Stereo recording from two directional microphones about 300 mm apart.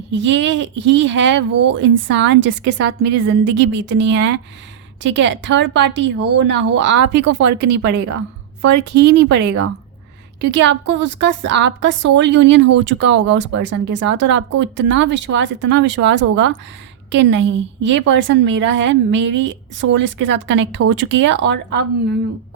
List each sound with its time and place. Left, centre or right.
0.1 s a woman's voice: right
7.4 s speech: right
7.8 s a woman's voice: right
10.4 s a woman's voice: right